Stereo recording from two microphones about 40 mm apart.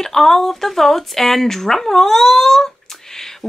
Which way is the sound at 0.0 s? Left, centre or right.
Centre.